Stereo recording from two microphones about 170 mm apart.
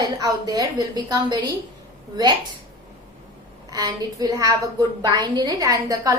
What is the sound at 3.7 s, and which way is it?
A woman's voice, 20° right (ahead or behind).